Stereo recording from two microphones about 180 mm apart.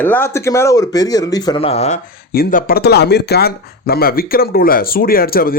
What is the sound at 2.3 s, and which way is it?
Speech, 55° left (ahead or behind).